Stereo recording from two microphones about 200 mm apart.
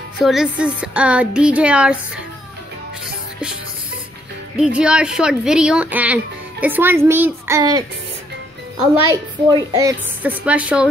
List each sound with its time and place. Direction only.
0.2 s speech: centre (ahead or behind)
4.6 s a child's voice: 5° right (ahead or behind)
9.1 s a woman's voice: 20° right (ahead or behind)
10.2 s a child's voice: 5° right (ahead or behind)